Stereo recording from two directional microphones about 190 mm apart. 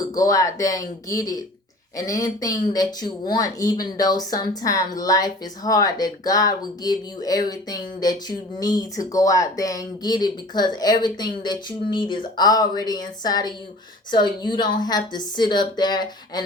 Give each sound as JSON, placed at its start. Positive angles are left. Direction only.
{"t": 0.1, "sound": "speech", "side_deg": 20}